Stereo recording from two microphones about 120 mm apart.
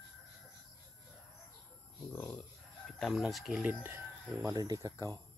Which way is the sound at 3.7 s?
15° right (ahead or behind).